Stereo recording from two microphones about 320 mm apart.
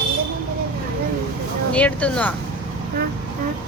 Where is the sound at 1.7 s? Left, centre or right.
Centre.